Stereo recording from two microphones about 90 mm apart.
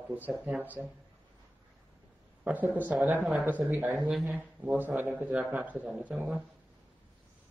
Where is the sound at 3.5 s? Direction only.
20° right (ahead or behind).